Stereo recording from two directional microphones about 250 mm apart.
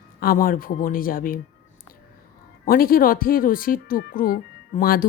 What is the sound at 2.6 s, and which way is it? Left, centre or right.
Speech, left.